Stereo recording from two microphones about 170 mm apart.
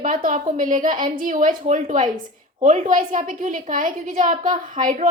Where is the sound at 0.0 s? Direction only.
50° right (ahead or behind).